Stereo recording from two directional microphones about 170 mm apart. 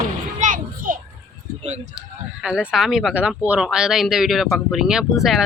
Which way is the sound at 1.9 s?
5° right (ahead or behind).